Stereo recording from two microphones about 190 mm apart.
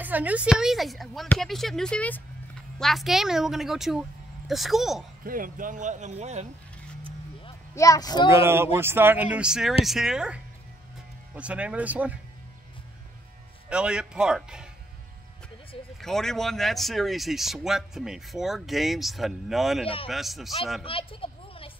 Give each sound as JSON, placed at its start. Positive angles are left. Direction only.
{"t": 0.0, "sound": "speech", "side_deg": -10}
{"t": 5.2, "sound": "speech", "side_deg": -45}
{"t": 7.7, "sound": "speech", "side_deg": 15}
{"t": 8.3, "sound": "speech", "side_deg": -15}
{"t": 13.7, "sound": "speech", "side_deg": -5}
{"t": 16.0, "sound": "speech", "side_deg": 0}
{"t": 20.8, "sound": "a sound", "side_deg": 30}